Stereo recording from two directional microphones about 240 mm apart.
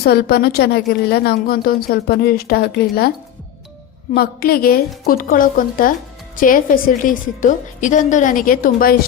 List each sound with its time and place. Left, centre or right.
0.0 s a woman's voice: left
4.1 s a woman's voice: left